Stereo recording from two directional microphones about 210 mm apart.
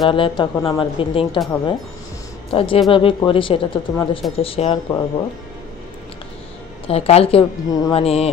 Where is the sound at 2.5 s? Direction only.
25° left (ahead or behind).